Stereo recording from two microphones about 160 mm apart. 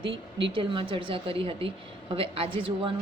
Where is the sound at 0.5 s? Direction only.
30° right (ahead or behind).